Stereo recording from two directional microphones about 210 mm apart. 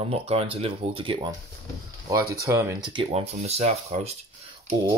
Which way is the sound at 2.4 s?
15° right (ahead or behind).